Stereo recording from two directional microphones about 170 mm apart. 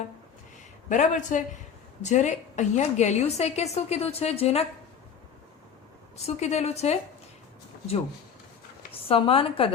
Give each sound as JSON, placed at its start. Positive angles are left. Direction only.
{"t": 0.9, "sound": "a woman's voice", "side_deg": 45}
{"t": 6.1, "sound": "a woman's voice", "side_deg": 40}
{"t": 9.0, "sound": "a woman's voice", "side_deg": 35}